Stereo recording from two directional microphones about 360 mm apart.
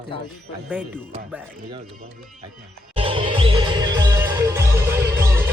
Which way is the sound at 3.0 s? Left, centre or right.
Centre.